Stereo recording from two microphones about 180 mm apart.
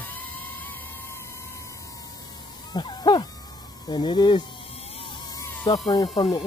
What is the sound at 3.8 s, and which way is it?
Speech, 25° left (ahead or behind).